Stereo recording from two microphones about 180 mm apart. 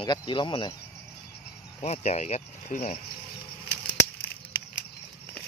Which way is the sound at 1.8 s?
40° left (ahead or behind).